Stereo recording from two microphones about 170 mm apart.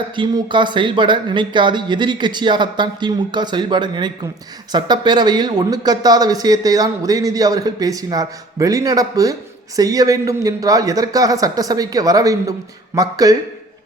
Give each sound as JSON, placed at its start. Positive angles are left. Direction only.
{"t": 0.2, "sound": "a man's voice", "side_deg": -30}